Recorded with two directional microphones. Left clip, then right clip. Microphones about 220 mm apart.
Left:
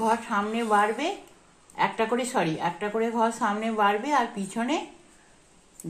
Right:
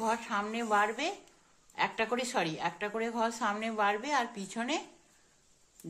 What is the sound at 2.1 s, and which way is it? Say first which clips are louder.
Speech: left 6 dB; 15° right (ahead or behind).